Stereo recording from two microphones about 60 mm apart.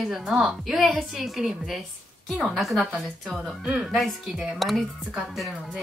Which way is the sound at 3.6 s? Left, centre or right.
Centre.